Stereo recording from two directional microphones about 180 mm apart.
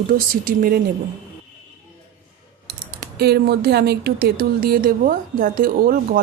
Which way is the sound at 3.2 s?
60° right (ahead or behind).